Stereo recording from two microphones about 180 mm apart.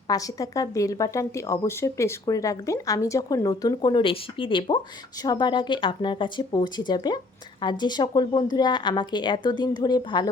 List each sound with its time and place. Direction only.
0.1 s a woman's voice: 20° left (ahead or behind)